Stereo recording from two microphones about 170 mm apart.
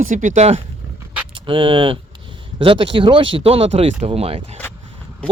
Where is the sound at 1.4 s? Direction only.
30° right (ahead or behind).